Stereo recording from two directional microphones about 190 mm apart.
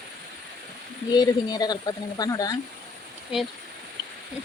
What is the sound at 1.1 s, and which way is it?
Speech, 20° left (ahead or behind).